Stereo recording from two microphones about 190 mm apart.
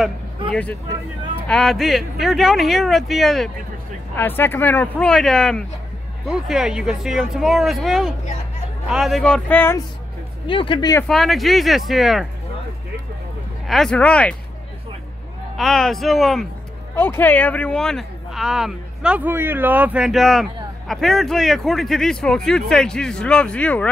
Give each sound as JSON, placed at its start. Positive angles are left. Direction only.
{"t": 0.5, "sound": "speech", "side_deg": 5}
{"t": 4.1, "sound": "speech", "side_deg": 10}
{"t": 10.4, "sound": "speech", "side_deg": 25}
{"t": 11.1, "sound": "speech", "side_deg": 0}
{"t": 13.7, "sound": "speech", "side_deg": 0}
{"t": 15.5, "sound": "speech", "side_deg": 0}
{"t": 16.9, "sound": "speech", "side_deg": 10}